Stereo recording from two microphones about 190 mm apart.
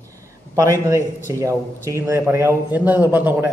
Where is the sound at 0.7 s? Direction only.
15° right (ahead or behind).